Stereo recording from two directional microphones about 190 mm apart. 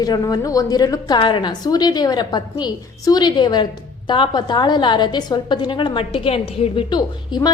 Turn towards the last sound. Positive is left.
turn(degrees=20)  # may be behind; listen again after turning